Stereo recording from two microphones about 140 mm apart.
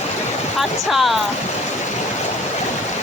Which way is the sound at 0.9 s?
Centre (ahead or behind).